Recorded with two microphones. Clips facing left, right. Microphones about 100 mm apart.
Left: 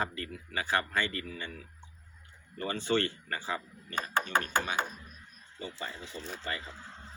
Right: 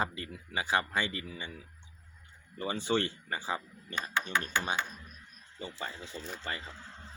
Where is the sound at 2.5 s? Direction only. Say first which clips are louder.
Left 1 dB; 15° right (ahead or behind).